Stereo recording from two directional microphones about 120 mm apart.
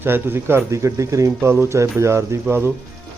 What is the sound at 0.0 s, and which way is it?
Speech, 20° right (ahead or behind).